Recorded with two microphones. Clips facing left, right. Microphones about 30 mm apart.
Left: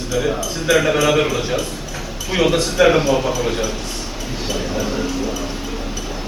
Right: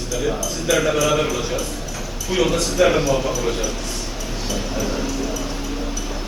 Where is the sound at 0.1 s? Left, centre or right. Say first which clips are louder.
Left 3 dB; left.